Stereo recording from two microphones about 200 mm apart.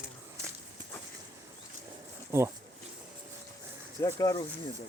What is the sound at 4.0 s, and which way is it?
Speech, 15° left (ahead or behind).